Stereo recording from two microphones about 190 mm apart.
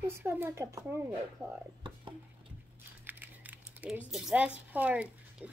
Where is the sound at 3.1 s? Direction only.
10° right (ahead or behind).